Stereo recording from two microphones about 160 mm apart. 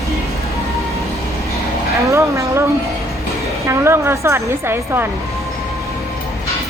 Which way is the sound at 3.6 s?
15° right (ahead or behind).